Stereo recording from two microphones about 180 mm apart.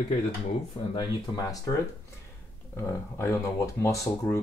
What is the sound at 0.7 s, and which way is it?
Speech, 25° left (ahead or behind).